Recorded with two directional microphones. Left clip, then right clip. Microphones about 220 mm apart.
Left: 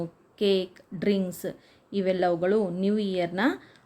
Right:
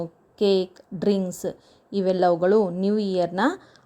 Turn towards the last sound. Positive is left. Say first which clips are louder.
# right 4 dB
turn(degrees=-15)  # may be behind; listen again after turning